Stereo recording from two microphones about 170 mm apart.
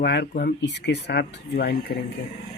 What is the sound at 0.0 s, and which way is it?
Speech, 80° left.